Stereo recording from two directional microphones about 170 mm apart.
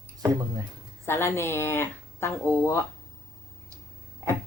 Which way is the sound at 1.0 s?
15° left (ahead or behind).